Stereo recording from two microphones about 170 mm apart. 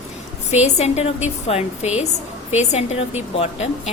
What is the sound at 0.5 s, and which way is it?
A woman's voice, 40° left (ahead or behind).